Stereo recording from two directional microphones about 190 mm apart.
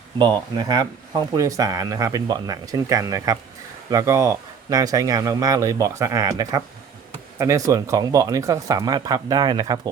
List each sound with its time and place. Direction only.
0.2 s speech: 20° right (ahead or behind)